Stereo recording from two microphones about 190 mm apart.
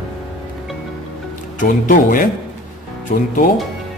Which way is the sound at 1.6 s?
45° left (ahead or behind).